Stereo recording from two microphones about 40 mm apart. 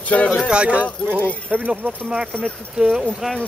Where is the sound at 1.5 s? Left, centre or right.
Right.